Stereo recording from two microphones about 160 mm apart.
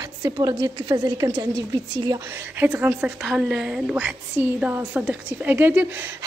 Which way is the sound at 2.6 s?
10° right (ahead or behind).